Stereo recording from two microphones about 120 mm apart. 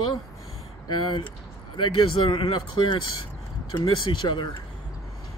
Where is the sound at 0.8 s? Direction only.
40° left (ahead or behind).